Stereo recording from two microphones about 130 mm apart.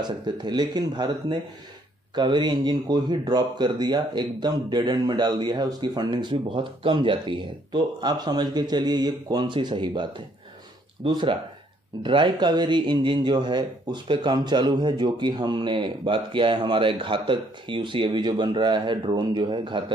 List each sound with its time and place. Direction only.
0.0 s speech: 35° right (ahead or behind)